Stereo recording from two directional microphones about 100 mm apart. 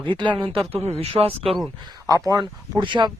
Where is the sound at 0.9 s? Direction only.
90° right; by 1.6 s 75° right (ahead or behind).